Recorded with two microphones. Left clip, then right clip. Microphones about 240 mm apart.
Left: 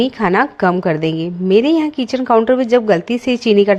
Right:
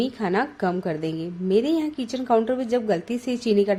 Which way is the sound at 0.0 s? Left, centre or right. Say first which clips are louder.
Left 10 dB; left.